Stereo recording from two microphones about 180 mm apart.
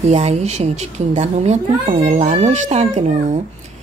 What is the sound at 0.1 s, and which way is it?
Speech, 35° right (ahead or behind).